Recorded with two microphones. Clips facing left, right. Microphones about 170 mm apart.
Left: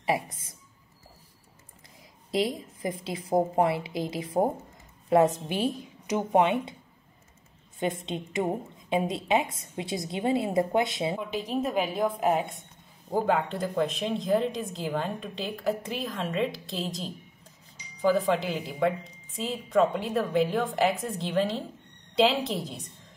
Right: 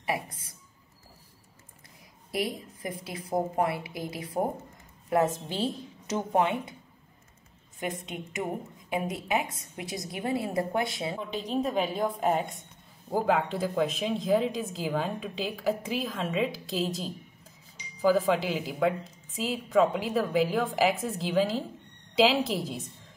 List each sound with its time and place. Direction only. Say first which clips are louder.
0.0 s a woman's voice: left 4 dB; 25° left (ahead or behind)
2.3 s a woman's voice: left 4 dB; 20° left (ahead or behind)
7.8 s a woman's voice: left 4 dB; 25° left (ahead or behind)
11.1 s speech: left 1 dB; 5° left (ahead or behind)